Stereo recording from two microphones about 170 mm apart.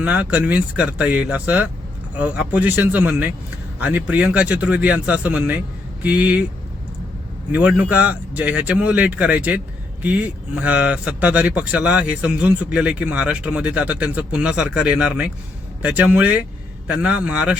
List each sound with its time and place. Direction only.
0.0 s speech: 10° right (ahead or behind)
7.5 s speech: 5° right (ahead or behind)